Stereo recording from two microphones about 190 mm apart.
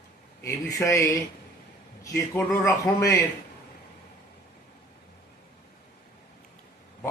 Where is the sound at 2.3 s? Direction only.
15° left (ahead or behind).